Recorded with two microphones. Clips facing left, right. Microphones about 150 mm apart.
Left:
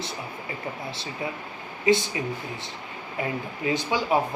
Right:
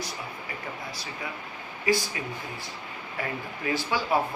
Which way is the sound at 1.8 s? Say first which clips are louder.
Left 5 dB; 20° left (ahead or behind).